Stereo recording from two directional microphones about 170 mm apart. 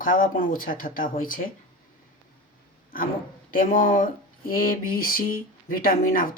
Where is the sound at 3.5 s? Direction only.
55° left (ahead or behind).